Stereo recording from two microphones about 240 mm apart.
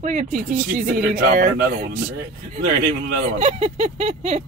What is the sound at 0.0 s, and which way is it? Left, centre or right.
Speech, right.